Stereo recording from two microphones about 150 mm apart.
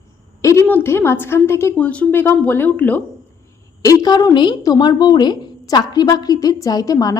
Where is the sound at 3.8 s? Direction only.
25° left (ahead or behind).